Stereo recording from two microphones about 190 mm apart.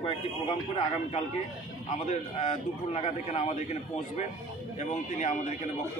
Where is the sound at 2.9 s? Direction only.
35° left (ahead or behind).